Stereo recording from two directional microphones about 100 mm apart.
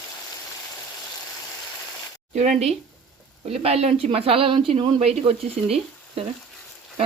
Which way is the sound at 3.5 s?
90° right.